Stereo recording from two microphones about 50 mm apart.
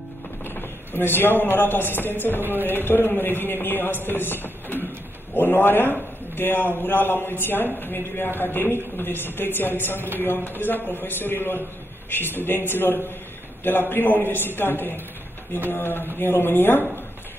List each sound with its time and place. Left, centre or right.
0.6 s a man's voice: left